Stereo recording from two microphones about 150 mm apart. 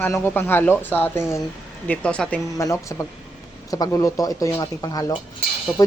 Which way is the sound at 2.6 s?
20° left (ahead or behind).